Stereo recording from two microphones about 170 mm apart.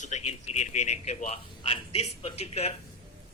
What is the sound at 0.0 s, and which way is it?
Speech, 40° left (ahead or behind).